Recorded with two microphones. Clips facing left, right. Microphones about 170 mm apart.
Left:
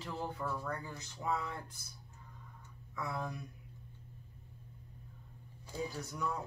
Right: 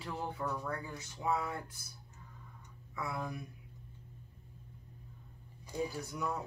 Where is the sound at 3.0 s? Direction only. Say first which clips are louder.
Right 1 dB; 5° right (ahead or behind).